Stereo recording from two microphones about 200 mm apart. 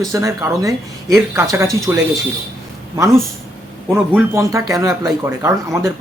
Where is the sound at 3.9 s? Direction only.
5° right (ahead or behind).